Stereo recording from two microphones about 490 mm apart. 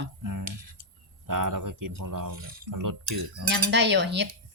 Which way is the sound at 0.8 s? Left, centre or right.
Right.